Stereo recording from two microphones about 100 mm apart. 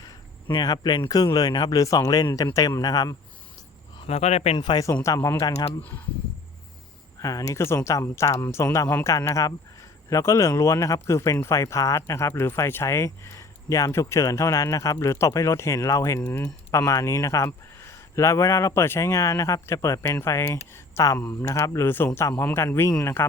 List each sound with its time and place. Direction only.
0.5 s speech: 45° left (ahead or behind)
4.0 s speech: 85° left
4.5 s speech: 50° left (ahead or behind)
5.0 s speech: 30° left (ahead or behind)
5.4 s speech: 45° left (ahead or behind)
7.2 s speech: 35° left (ahead or behind)
16.2 s speech: 15° left (ahead or behind)
16.7 s speech: 30° left (ahead or behind)